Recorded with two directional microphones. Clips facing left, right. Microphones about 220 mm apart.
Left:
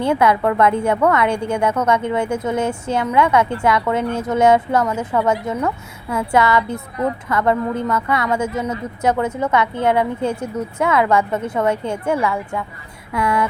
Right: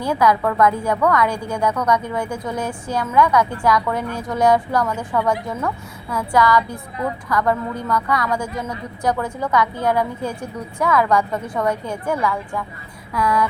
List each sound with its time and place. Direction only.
0.0 s a woman's voice: 25° left (ahead or behind)